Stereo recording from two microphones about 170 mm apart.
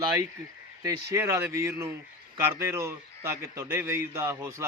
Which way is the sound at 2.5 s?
15° right (ahead or behind).